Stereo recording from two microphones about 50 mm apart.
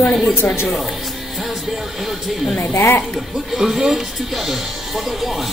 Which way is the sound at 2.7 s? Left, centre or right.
Left.